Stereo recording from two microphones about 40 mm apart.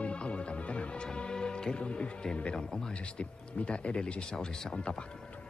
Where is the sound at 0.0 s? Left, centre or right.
Left.